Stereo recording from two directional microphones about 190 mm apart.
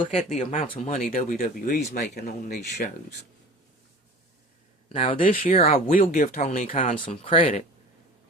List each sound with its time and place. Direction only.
0.0 s speech: 30° left (ahead or behind); by 2.6 s 50° left (ahead or behind)
2.6 s speech: 40° left (ahead or behind)
4.9 s speech: 30° left (ahead or behind)